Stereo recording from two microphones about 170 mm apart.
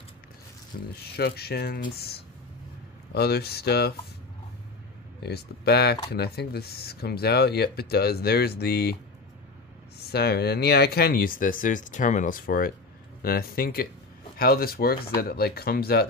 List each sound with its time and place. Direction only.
0.7 s speech: 55° left (ahead or behind)
1.1 s speech: 70° left (ahead or behind)
5.2 s speech: 70° left (ahead or behind)
10.1 s speech: 70° left (ahead or behind)